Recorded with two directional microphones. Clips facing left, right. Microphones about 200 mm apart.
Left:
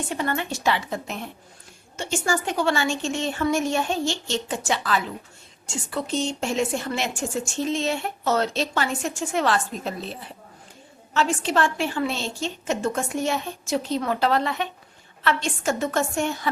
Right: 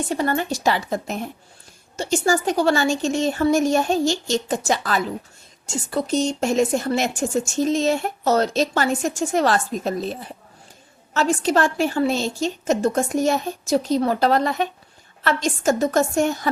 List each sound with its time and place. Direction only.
0.1 s speech: 40° right (ahead or behind)